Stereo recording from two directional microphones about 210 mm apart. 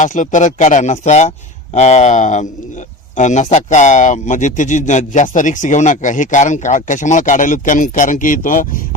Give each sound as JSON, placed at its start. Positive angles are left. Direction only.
{"t": 0.0, "sound": "a man's voice", "side_deg": 35}